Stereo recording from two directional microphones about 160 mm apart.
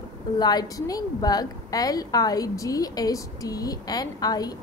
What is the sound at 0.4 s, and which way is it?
A woman's voice, 25° left (ahead or behind).